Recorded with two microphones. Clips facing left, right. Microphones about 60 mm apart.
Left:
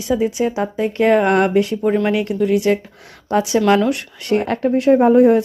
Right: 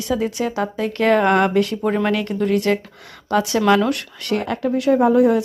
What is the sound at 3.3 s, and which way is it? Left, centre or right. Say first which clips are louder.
Speech: left 1 dB; left.